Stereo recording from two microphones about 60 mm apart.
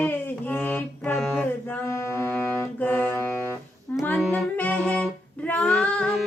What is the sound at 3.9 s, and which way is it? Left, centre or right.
Female singing, left.